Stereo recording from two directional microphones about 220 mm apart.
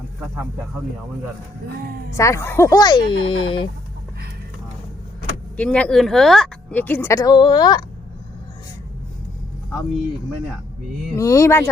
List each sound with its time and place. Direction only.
2.1 s a woman's voice: 15° left (ahead or behind)
5.5 s a woman's voice: 5° left (ahead or behind)
11.2 s a woman's voice: 15° left (ahead or behind)